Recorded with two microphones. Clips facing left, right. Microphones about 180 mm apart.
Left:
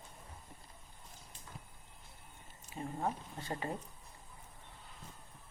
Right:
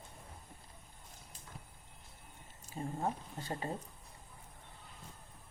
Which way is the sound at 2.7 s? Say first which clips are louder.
Right 1 dB; 35° right (ahead or behind).